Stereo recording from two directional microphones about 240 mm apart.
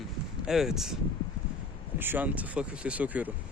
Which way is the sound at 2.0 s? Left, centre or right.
Centre.